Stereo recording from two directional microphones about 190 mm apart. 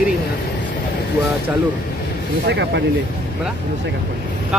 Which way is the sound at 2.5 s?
65° right (ahead or behind).